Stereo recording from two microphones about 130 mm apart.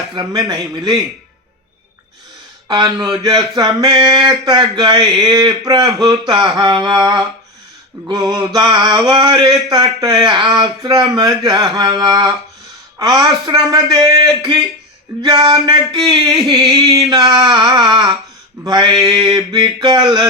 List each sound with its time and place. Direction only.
0.2 s mantra: 30° right (ahead or behind)
2.6 s a man's voice: 30° right (ahead or behind)
4.1 s mantra: 30° right (ahead or behind)
13.0 s a man's voice: 30° right (ahead or behind)
15.2 s mantra: 30° right (ahead or behind)